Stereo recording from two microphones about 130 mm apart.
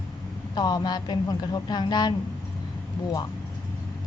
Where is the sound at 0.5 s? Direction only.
30° left (ahead or behind).